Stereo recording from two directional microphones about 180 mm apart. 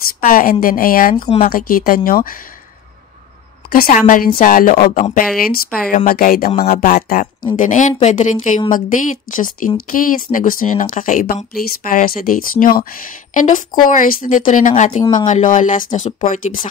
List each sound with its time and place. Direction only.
0.2 s speech: 50° left (ahead or behind)
1.1 s speech: 30° left (ahead or behind)
1.5 s speech: 50° left (ahead or behind)
3.7 s speech: 50° left (ahead or behind)
6.7 s speech: 40° left (ahead or behind)